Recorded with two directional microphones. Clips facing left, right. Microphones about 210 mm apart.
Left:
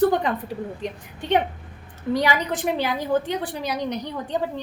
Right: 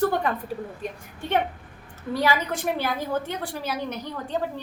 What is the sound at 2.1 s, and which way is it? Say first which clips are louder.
A woman's voice: left 1 dB; 15° left (ahead or behind).